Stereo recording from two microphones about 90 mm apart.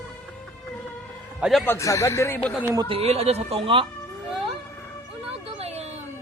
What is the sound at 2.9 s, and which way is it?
Speech, 90° right.